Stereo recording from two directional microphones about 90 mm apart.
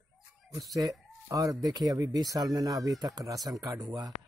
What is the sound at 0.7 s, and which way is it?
Speech, 40° right (ahead or behind).